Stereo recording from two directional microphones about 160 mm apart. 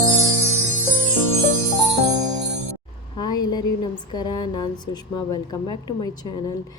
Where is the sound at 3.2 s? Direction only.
25° left (ahead or behind).